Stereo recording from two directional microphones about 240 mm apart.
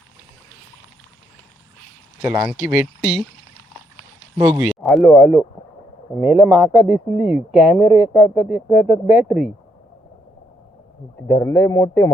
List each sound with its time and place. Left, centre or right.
2.2 s speech: centre
4.4 s speech: centre
4.8 s speech: centre
11.3 s speech: centre